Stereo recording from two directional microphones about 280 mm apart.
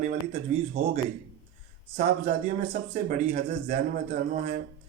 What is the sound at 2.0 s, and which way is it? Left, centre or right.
Speech, right.